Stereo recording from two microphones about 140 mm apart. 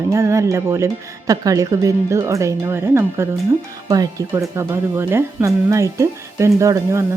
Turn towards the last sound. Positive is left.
turn(degrees=-20)  # may be behind; listen again after turning